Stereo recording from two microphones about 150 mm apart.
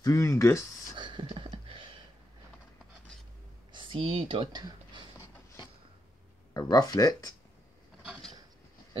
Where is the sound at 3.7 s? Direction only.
40° right (ahead or behind).